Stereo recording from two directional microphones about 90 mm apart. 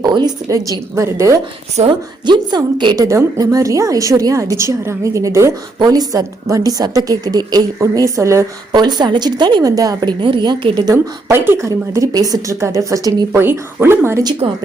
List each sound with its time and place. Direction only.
0.0 s a woman's voice: 50° right (ahead or behind)
2.2 s a woman's voice: 55° right (ahead or behind)
3.0 s a woman's voice: 35° right (ahead or behind)
5.8 s a woman's voice: 45° right (ahead or behind)
8.7 s a woman's voice: 50° right (ahead or behind)
10.2 s a woman's voice: 75° right (ahead or behind)
10.4 s a woman's voice: 55° right (ahead or behind)
10.9 s a woman's voice: 25° right (ahead or behind)
13.3 s speech: 25° right (ahead or behind)
14.4 s speech: 90° right